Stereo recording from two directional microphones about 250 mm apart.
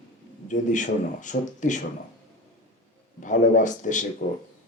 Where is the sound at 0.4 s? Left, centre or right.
Left.